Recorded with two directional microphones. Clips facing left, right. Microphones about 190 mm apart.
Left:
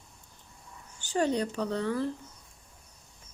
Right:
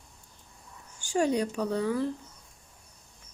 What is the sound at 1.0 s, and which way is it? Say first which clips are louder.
Speech: right 2 dB; 10° right (ahead or behind).